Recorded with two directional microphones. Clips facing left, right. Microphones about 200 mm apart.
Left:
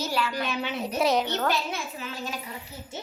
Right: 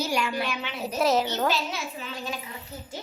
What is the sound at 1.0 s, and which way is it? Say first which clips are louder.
Speech: right 1 dB; centre (ahead or behind).